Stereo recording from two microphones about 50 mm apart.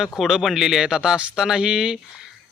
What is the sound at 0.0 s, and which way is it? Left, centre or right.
Speech, centre.